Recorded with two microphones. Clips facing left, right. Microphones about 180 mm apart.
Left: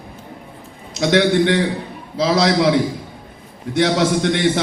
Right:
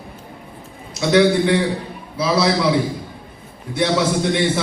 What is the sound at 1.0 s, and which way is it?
A man's voice, 90° left.